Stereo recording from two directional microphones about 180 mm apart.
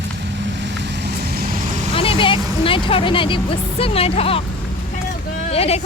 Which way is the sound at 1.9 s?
30° left (ahead or behind).